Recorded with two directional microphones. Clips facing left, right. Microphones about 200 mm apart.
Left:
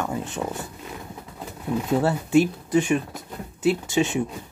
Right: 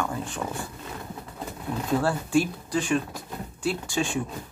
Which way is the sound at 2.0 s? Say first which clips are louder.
Left 5 dB; 20° left (ahead or behind).